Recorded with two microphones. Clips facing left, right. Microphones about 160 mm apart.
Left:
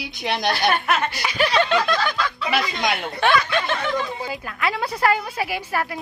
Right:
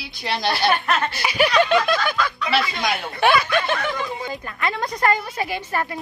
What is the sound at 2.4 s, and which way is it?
Speech, 15° left (ahead or behind).